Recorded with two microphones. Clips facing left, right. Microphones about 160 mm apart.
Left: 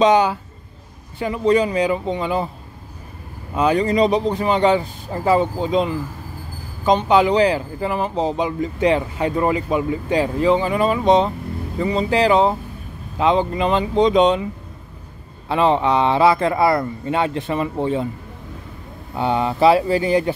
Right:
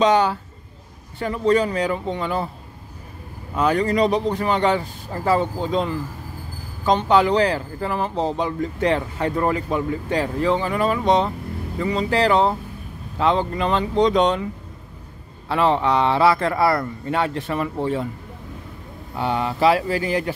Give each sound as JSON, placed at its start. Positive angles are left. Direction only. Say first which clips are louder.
{"t": 0.0, "sound": "speech", "louder": "left 2 dB", "side_deg": 15}
{"t": 3.5, "sound": "speech", "louder": "left 2 dB", "side_deg": 20}
{"t": 19.1, "sound": "speech", "louder": "left 3 dB", "side_deg": 20}